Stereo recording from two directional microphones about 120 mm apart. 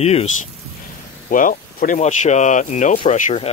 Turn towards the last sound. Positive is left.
turn(degrees=90)